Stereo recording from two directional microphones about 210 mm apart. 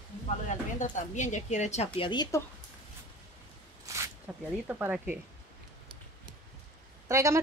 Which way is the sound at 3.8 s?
15° right (ahead or behind).